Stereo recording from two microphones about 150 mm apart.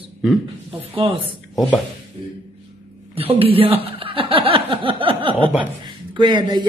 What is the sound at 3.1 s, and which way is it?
Speech, 40° right (ahead or behind).